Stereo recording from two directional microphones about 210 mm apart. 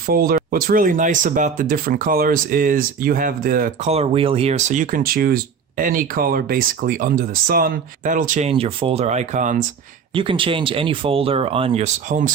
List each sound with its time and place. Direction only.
0.1 s speech: 45° right (ahead or behind)
3.8 s speech: 30° right (ahead or behind)
10.2 s speech: 25° right (ahead or behind)